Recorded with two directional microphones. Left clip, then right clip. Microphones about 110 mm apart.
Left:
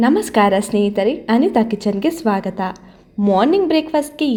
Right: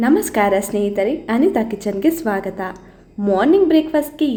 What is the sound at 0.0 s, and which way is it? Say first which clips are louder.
A woman's voice: left 1 dB; 40° left (ahead or behind).